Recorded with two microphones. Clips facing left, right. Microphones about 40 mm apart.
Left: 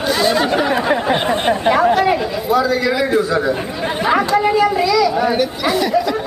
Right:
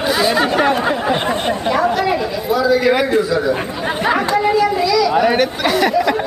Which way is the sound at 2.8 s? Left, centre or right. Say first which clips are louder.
Right 3 dB; right.